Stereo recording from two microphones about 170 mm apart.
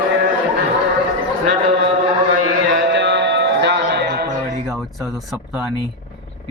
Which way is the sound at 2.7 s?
90° right.